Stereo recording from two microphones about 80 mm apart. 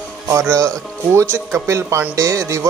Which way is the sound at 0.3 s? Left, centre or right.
Right.